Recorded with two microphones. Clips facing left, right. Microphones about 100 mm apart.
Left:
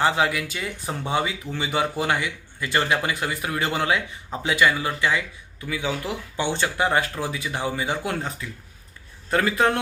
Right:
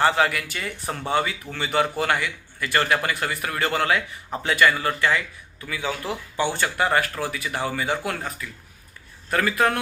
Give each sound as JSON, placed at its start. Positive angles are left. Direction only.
{"t": 0.0, "sound": "speech", "side_deg": 15}